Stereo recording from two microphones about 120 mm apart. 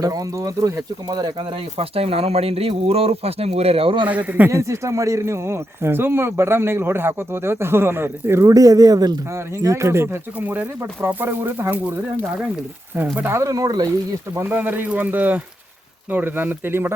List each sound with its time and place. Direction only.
0.0 s speech: 30° right (ahead or behind)
1.8 s speech: 55° right (ahead or behind)
4.1 s speech: 15° right (ahead or behind)
4.5 s speech: 25° right (ahead or behind)
13.1 s speech: 20° right (ahead or behind)
14.3 s speech: 15° right (ahead or behind)